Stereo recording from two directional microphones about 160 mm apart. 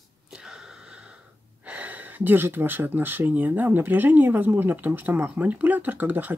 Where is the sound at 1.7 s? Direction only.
10° right (ahead or behind).